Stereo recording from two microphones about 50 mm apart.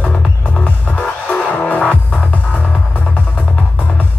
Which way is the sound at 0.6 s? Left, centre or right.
Left.